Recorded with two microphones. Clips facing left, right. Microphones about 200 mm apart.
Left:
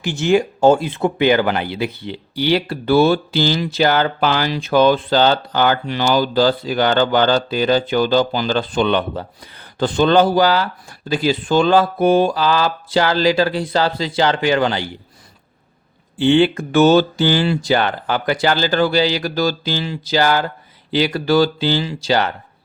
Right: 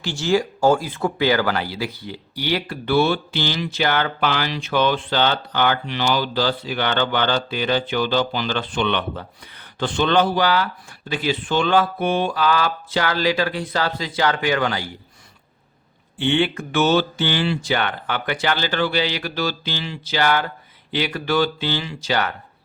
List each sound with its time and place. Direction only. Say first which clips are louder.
0.0 s speech: left 4 dB; 20° left (ahead or behind)
16.1 s speech: left 7 dB; 35° left (ahead or behind)